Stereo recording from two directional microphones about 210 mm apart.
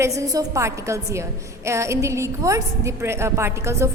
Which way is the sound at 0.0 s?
15° right (ahead or behind).